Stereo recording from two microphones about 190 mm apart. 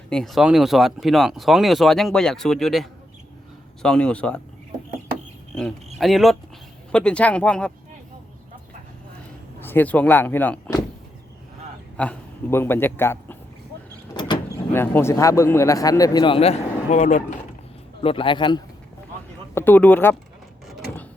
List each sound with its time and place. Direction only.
0.1 s speech: centre (ahead or behind)
6.0 s speech: centre (ahead or behind)
9.6 s speech: 10° left (ahead or behind)
11.9 s a man's voice: 10° left (ahead or behind)
14.1 s vehicle: 25° left (ahead or behind)
14.7 s a man's voice: 10° left (ahead or behind); by 17.2 s 40° left (ahead or behind)
18.0 s a man's voice: 30° left (ahead or behind)
19.5 s speech: 10° left (ahead or behind)
20.7 s a sound: centre (ahead or behind)